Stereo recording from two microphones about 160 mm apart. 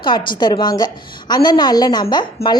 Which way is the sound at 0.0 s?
30° left (ahead or behind).